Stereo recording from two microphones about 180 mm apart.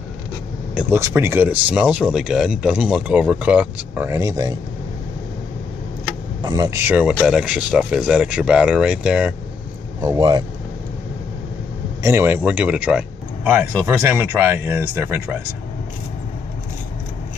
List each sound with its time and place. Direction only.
0.7 s speech: 15° right (ahead or behind)
6.4 s speech: 20° right (ahead or behind); by 9.3 s 5° right (ahead or behind)
10.0 s speech: 20° right (ahead or behind)
12.0 s speech: 15° right (ahead or behind)